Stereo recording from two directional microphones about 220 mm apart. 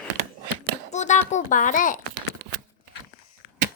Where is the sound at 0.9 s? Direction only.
30° left (ahead or behind).